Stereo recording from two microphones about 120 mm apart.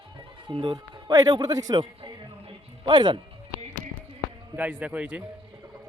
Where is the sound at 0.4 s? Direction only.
40° right (ahead or behind).